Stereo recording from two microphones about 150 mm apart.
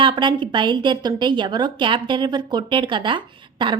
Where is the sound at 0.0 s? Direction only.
30° right (ahead or behind).